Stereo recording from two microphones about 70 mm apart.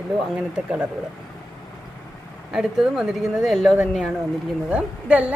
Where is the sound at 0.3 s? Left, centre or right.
Right.